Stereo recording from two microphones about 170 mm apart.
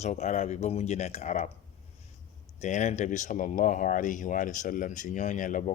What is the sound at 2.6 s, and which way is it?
Speech, 45° left (ahead or behind).